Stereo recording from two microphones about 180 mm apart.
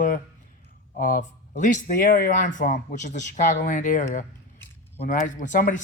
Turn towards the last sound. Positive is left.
turn(degrees=45)  # may be behind; listen again after turning